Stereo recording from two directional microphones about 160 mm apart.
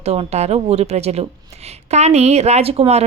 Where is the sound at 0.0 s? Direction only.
40° right (ahead or behind).